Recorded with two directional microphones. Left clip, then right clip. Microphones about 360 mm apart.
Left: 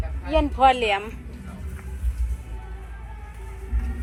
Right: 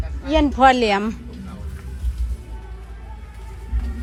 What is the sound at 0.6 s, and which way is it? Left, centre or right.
Speech, right.